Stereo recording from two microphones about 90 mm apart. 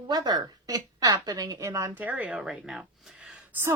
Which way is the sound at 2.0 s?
20° right (ahead or behind).